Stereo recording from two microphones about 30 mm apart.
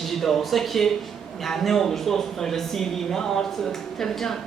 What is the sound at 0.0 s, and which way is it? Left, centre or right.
Speech, centre.